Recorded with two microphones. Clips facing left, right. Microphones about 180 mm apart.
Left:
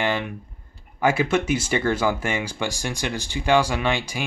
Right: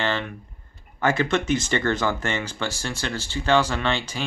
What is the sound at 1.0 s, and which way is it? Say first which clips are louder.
Speech: left 1 dB; 10° left (ahead or behind).